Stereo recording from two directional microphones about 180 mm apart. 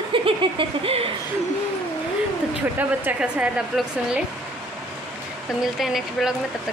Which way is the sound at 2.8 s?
10° right (ahead or behind).